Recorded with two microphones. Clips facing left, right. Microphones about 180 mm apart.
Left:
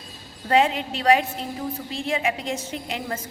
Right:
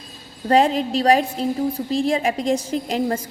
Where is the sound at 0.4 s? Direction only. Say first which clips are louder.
Right 4 dB; 35° right (ahead or behind).